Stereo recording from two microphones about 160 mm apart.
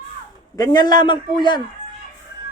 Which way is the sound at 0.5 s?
25° left (ahead or behind).